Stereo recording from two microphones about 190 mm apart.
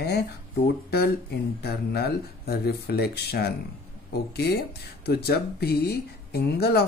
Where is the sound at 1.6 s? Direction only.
55° left (ahead or behind).